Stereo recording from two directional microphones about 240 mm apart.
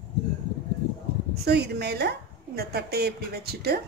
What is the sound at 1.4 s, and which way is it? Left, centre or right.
A woman's voice, right.